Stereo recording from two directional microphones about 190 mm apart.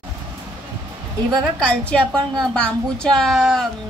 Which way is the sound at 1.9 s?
5° left (ahead or behind).